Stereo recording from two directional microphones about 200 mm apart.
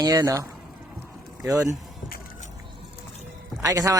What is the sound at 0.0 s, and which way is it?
Speech, 15° right (ahead or behind).